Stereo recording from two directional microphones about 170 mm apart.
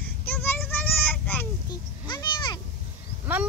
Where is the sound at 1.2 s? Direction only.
10° left (ahead or behind).